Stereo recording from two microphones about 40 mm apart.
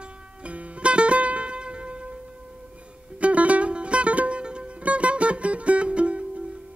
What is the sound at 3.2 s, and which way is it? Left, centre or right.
Music, right.